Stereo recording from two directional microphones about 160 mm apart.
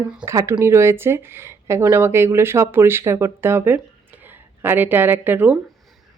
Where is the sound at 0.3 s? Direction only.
20° right (ahead or behind).